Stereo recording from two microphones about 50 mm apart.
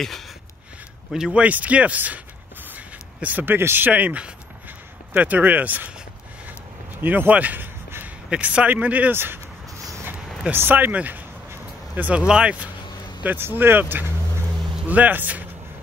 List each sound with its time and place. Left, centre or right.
1.3 s speech: right
2.7 s a sound: right
3.9 s speech: right
6.4 s a sound: right
8.4 s speech: right
9.1 s speech: right
10.5 s speech: right
12.3 s speech: centre
13.4 s speech: right
14.9 s speech: right